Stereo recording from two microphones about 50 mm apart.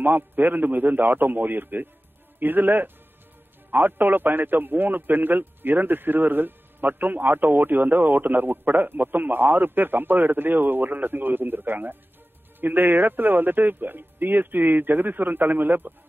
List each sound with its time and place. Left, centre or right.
0.0 s a man's voice: right